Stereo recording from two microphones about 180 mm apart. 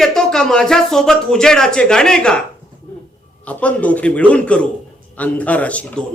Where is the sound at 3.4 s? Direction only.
5° left (ahead or behind).